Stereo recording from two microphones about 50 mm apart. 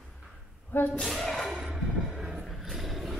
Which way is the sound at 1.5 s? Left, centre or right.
Centre.